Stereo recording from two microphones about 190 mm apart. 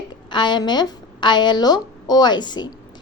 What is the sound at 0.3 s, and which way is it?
A woman's voice, 25° left (ahead or behind).